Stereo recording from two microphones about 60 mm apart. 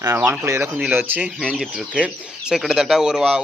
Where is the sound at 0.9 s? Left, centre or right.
Right.